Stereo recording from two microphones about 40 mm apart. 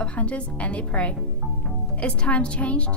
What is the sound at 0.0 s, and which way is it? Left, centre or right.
A woman's voice, left.